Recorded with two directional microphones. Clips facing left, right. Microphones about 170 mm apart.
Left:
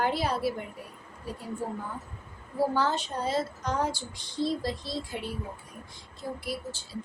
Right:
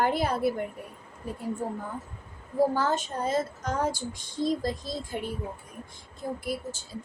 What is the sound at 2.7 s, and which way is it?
Speech, 45° right (ahead or behind).